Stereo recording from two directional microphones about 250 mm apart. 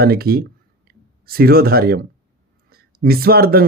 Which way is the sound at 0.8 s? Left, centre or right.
Right.